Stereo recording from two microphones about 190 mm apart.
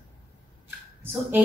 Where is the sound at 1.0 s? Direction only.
10° right (ahead or behind).